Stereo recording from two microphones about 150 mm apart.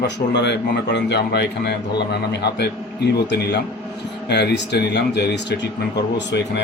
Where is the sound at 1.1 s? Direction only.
90° left.